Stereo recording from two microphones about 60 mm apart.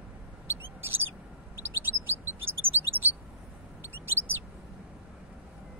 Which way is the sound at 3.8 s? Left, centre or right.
Right.